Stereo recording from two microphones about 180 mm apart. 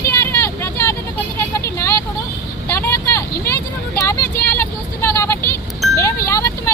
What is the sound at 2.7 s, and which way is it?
Vehicle, 15° left (ahead or behind).